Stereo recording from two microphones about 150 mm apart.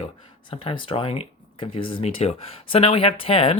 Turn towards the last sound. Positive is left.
turn(degrees=40)  # may be behind; listen again after turning